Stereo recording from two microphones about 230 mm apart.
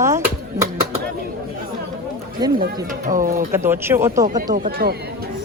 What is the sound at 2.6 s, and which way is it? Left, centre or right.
Speech, right.